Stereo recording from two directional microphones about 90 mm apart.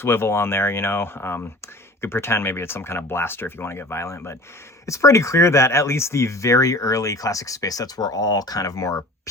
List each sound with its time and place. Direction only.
0.0 s speech: 25° left (ahead or behind)